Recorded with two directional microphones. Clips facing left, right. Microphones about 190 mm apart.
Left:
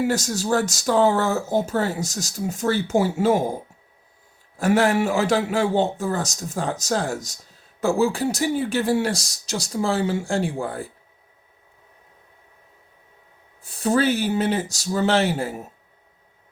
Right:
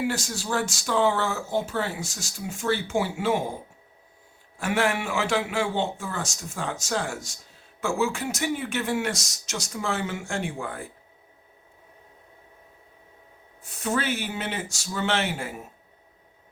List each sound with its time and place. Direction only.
0.0 s speech: 40° left (ahead or behind)
13.6 s speech: 35° left (ahead or behind)